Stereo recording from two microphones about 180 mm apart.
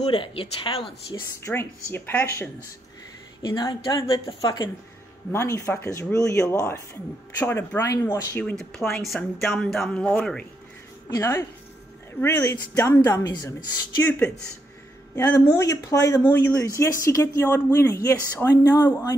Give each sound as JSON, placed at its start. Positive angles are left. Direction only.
{"t": 0.1, "sound": "speech", "side_deg": 30}
{"t": 1.4, "sound": "speech", "side_deg": 15}
{"t": 3.4, "sound": "speech", "side_deg": 25}
{"t": 11.1, "sound": "speech", "side_deg": 15}
{"t": 15.1, "sound": "speech", "side_deg": 20}